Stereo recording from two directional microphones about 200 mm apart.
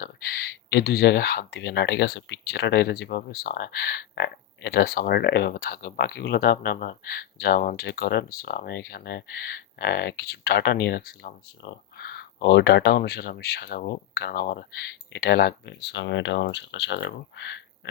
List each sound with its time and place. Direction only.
0.0 s speech: 50° left (ahead or behind)